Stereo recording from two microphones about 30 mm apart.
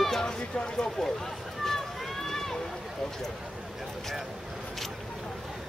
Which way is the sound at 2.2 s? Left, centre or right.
Centre.